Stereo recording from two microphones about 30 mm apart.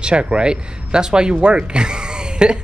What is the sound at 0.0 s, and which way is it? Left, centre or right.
Speech, right.